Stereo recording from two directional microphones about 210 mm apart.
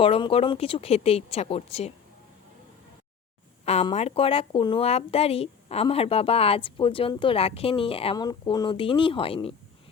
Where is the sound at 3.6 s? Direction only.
30° left (ahead or behind).